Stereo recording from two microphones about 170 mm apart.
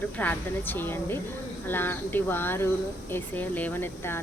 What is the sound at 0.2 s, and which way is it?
Speech, 10° left (ahead or behind).